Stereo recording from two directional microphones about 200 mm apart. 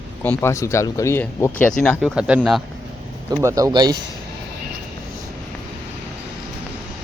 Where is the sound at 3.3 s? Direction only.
15° right (ahead or behind).